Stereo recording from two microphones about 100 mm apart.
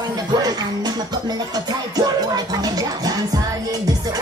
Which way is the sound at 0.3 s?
40° right (ahead or behind).